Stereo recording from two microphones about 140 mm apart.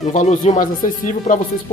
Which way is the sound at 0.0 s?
60° left (ahead or behind).